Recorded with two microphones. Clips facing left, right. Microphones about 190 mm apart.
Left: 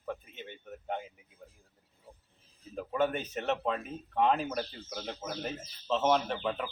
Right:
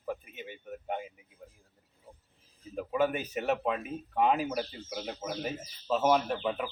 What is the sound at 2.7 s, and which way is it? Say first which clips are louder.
A man's voice: right 1 dB; 10° right (ahead or behind).